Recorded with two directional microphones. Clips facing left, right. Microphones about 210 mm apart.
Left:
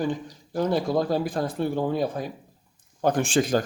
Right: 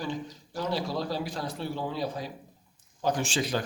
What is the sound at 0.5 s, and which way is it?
Speech, 50° left (ahead or behind).